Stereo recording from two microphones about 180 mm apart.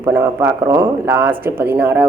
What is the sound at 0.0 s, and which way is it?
Speech, 15° right (ahead or behind).